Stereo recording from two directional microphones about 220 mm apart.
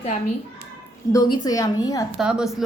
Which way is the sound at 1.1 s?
20° left (ahead or behind).